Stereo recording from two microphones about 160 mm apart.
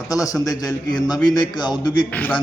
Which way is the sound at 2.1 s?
10° left (ahead or behind).